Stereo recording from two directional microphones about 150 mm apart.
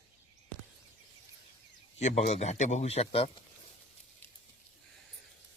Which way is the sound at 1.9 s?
50° left (ahead or behind).